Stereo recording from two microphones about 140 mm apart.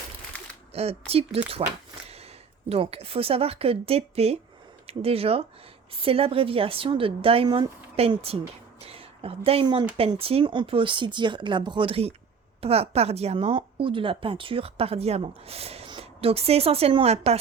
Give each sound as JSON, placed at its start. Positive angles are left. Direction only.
{"t": 0.7, "sound": "a woman's voice", "side_deg": -45}
{"t": 7.4, "sound": "speech", "side_deg": -30}
{"t": 7.9, "sound": "a woman's voice", "side_deg": -45}
{"t": 8.9, "sound": "a sound", "side_deg": -45}
{"t": 10.2, "sound": "a woman's voice", "side_deg": -45}